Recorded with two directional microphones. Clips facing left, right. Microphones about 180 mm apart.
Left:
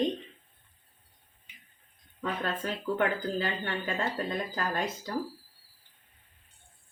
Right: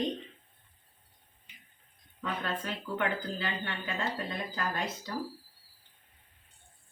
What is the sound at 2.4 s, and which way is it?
Speech, 40° left (ahead or behind).